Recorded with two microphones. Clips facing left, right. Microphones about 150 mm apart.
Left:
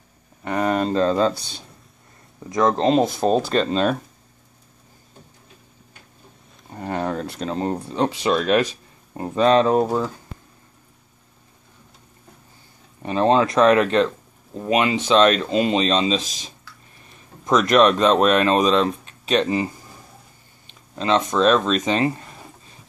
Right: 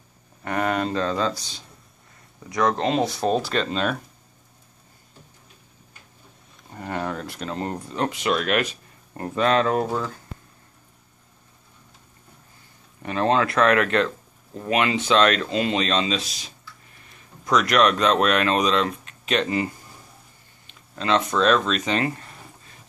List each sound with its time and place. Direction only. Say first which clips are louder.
0.4 s speech: left 3 dB; 20° left (ahead or behind)
1.3 s speech: left 2 dB; 60° left (ahead or behind)
2.5 s speech: left 4 dB; 30° left (ahead or behind)
6.7 s a sound: left 4 dB; 25° left (ahead or behind)
7.9 s speech: left 3 dB; 25° left (ahead or behind)
9.4 s speech: left 5 dB; 25° left (ahead or behind)
13.0 s speech: left 4 dB; 25° left (ahead or behind)
17.5 s speech: left 4 dB; 25° left (ahead or behind)
20.9 s speech: left 2 dB; 20° left (ahead or behind)